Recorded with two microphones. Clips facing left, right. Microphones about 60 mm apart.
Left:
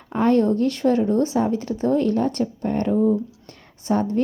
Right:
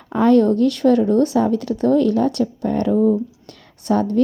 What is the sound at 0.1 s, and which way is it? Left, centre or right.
Speech, right.